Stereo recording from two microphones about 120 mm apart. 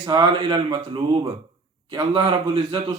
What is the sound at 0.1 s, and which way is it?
Speech, 40° right (ahead or behind).